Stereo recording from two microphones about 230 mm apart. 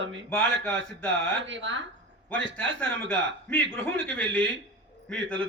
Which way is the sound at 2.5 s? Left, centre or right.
Centre.